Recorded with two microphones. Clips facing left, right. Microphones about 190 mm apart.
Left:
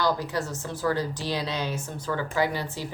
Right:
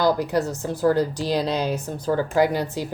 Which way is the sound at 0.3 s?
35° right (ahead or behind).